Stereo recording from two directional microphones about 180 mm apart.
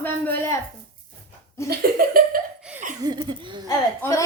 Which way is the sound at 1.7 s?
55° right (ahead or behind).